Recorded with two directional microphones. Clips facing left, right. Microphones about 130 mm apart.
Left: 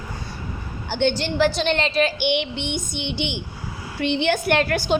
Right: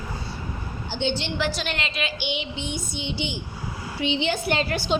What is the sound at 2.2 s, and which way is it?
Child singing, 65° left (ahead or behind).